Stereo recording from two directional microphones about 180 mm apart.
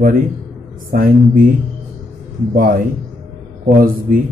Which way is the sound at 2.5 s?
50° right (ahead or behind).